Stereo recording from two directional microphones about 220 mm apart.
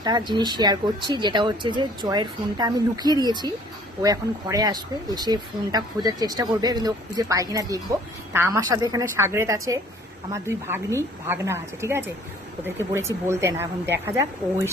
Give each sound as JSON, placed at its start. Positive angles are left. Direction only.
{"t": 0.0, "sound": "speech", "side_deg": -20}